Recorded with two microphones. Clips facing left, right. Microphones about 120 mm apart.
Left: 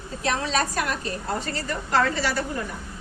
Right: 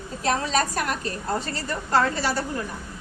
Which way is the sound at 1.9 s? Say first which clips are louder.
Right 1 dB; 40° right (ahead or behind).